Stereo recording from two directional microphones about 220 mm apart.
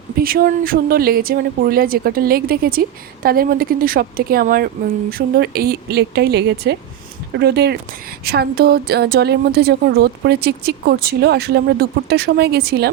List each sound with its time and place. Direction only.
0.2 s speech: 40° right (ahead or behind)